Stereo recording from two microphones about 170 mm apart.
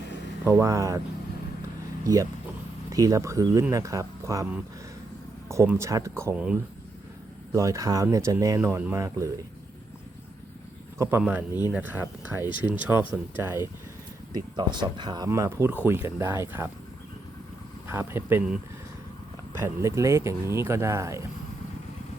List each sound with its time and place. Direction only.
0.4 s speech: 15° right (ahead or behind)
2.9 s speech: 20° right (ahead or behind)
10.9 s a man's voice: 15° right (ahead or behind)
14.3 s speech: 25° right (ahead or behind)
17.8 s speech: 15° right (ahead or behind)
19.5 s speech: 15° right (ahead or behind)